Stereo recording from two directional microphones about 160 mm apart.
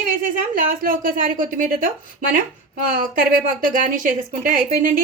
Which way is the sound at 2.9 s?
60° right (ahead or behind).